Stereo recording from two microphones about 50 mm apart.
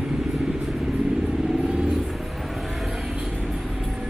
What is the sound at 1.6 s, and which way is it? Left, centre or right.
Vehicle, centre.